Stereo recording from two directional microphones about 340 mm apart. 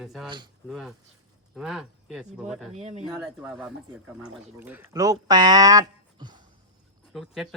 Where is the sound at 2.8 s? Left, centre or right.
Centre.